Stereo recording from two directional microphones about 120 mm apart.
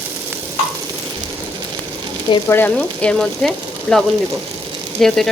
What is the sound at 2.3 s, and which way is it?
Speech, 40° left (ahead or behind).